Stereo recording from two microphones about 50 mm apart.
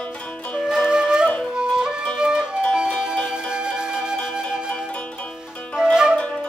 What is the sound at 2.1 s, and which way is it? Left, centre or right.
Music, centre.